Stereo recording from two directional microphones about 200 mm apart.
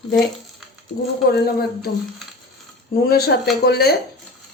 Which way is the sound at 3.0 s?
50° left (ahead or behind).